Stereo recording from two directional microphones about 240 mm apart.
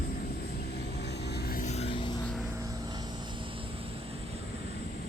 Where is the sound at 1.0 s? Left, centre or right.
Left; by 2.2 s centre.